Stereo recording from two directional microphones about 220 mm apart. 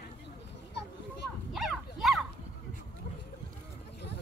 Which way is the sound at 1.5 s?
Centre (ahead or behind).